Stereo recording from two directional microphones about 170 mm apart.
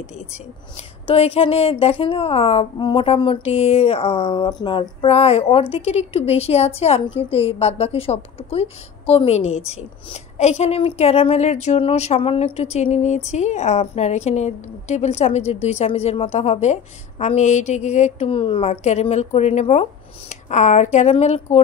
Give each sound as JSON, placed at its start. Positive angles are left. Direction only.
{"t": 0.3, "sound": "a woman's voice", "side_deg": 35}